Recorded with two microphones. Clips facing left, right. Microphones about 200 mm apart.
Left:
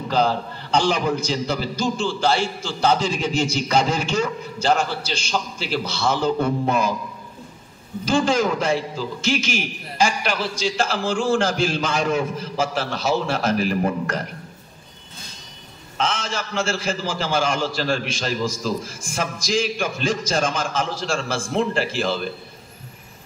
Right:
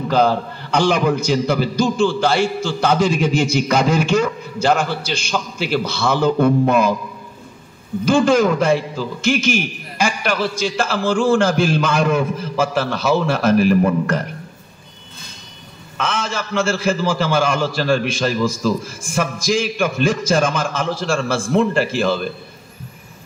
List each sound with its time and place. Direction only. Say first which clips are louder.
0.1 s a man's voice: right 4 dB; 55° right (ahead or behind)
8.0 s a man's voice: right 5 dB; 55° right (ahead or behind)
16.0 s a man's voice: right 2 dB; 55° right (ahead or behind)